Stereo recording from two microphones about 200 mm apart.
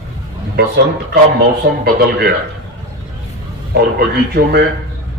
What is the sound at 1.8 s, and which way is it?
Speech, 50° right (ahead or behind).